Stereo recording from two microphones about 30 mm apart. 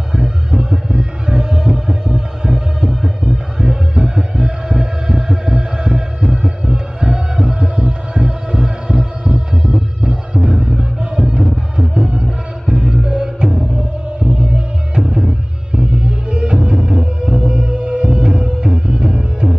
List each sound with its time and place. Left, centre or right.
0.1 s music: right